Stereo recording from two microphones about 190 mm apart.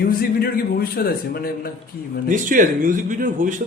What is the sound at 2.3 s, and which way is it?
A man's voice, 45° right (ahead or behind).